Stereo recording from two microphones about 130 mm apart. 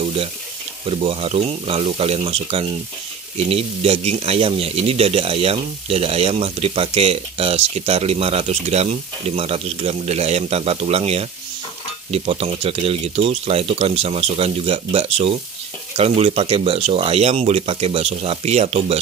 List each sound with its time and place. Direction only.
0.0 s sizzle: 45° right (ahead or behind)
0.8 s speech: 45° right (ahead or behind)